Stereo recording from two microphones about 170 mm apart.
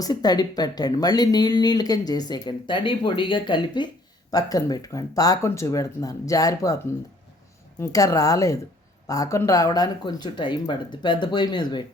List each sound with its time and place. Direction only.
0.0 s speech: 25° left (ahead or behind)
7.8 s speech: 20° left (ahead or behind)